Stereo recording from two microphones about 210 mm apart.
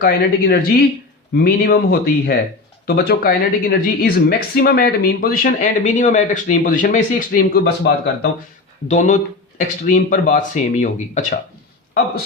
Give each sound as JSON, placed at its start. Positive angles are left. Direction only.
{"t": 0.0, "sound": "a woman's voice", "side_deg": 50}
{"t": 8.9, "sound": "speech", "side_deg": 35}